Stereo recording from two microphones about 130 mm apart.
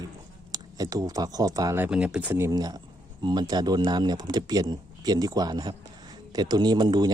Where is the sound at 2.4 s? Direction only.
30° right (ahead or behind).